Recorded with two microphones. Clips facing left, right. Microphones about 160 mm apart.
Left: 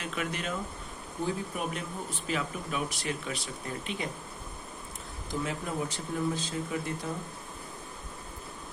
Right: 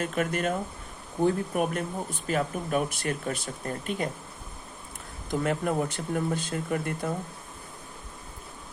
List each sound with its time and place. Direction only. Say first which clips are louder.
0.0 s speech: right 7 dB; 45° right (ahead or behind)
5.3 s speech: right 7 dB; 60° right (ahead or behind)